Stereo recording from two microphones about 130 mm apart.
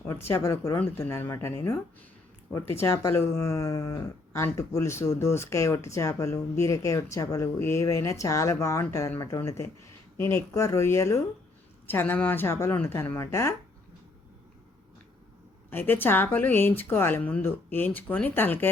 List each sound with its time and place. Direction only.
0.0 s speech: 20° left (ahead or behind)
2.8 s a woman's voice: 20° left (ahead or behind)
15.7 s a woman's voice: 15° left (ahead or behind)